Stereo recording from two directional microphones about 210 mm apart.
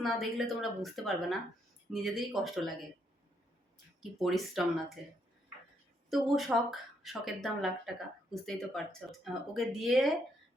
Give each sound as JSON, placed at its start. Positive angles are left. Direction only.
{"t": 0.0, "sound": "speech", "side_deg": 0}
{"t": 4.2, "sound": "speech", "side_deg": 0}
{"t": 6.1, "sound": "speech", "side_deg": 0}